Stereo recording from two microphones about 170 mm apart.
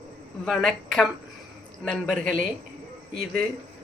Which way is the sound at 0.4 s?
Centre (ahead or behind).